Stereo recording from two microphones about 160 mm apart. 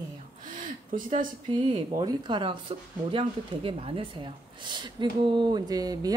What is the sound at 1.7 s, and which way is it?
Speech, 30° right (ahead or behind).